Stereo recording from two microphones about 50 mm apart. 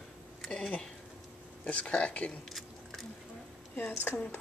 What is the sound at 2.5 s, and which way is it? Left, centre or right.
Biting, centre.